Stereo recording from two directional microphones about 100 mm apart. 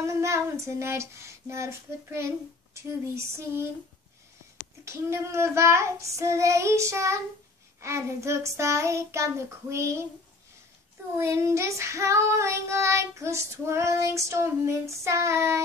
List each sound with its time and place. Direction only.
0.0 s child singing: 30° right (ahead or behind)
4.8 s child singing: 25° right (ahead or behind)
11.1 s child singing: 25° right (ahead or behind)